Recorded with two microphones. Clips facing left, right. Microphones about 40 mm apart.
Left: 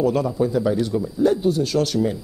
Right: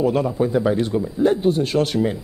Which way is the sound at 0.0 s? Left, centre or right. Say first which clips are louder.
Right 1 dB; right.